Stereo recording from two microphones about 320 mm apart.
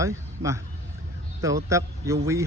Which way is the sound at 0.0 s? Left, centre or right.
Centre.